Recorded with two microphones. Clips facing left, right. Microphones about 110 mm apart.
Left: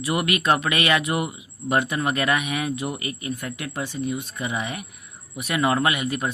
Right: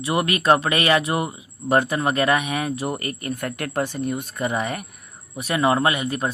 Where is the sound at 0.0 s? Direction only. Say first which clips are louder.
Right 2 dB; 30° right (ahead or behind).